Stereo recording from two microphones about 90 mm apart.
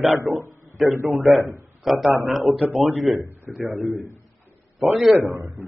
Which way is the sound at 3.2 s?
30° right (ahead or behind).